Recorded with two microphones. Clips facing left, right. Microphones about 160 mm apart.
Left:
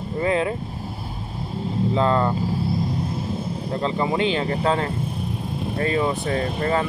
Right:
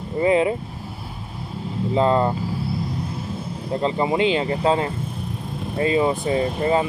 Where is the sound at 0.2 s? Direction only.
15° right (ahead or behind).